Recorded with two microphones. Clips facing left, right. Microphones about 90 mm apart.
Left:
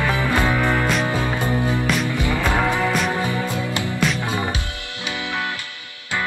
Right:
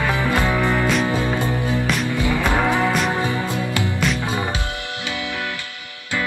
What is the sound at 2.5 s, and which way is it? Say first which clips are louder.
Music: right 1 dB; 20° right (ahead or behind).